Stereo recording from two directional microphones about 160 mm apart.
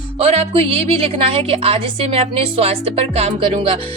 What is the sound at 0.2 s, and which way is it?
A woman's voice, 40° right (ahead or behind).